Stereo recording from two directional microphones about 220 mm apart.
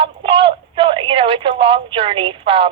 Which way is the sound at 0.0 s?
25° right (ahead or behind).